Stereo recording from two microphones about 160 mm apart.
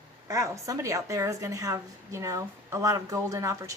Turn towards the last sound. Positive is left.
turn(degrees=-20)  # may be behind; listen again after turning